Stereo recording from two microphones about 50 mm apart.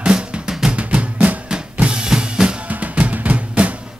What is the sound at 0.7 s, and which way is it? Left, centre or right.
Drum, right.